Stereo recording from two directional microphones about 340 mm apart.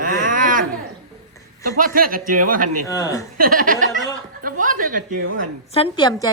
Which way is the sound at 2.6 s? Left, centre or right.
Right.